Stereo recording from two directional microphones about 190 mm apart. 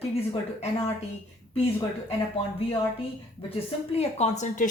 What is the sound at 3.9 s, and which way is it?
Speech, 35° left (ahead or behind).